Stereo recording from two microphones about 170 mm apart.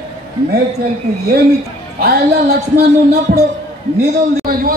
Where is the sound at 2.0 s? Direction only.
65° right (ahead or behind).